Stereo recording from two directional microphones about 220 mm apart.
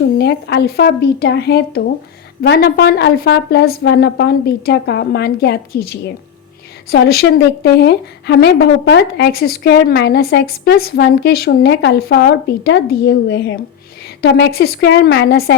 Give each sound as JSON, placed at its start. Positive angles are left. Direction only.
{"t": 0.2, "sound": "a woman's voice", "side_deg": 50}